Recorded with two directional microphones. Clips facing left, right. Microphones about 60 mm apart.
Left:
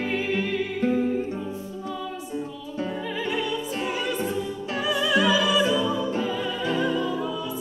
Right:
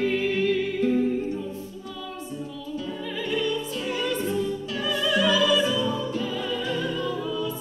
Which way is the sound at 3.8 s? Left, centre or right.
Centre.